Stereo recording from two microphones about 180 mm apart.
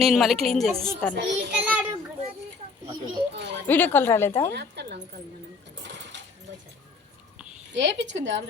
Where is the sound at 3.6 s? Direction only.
10° left (ahead or behind).